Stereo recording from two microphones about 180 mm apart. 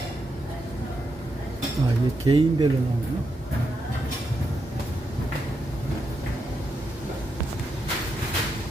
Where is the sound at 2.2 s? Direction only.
25° right (ahead or behind).